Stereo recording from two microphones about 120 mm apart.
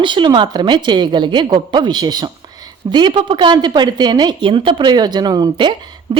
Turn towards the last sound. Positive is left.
turn(degrees=-40)  # may be behind; listen again after turning